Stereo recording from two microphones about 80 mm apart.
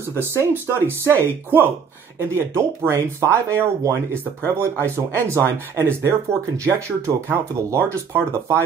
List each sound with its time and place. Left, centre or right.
0.1 s speech: left
0.7 s speech: right